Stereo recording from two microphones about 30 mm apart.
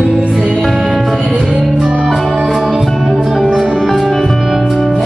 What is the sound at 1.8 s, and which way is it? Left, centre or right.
Music, right.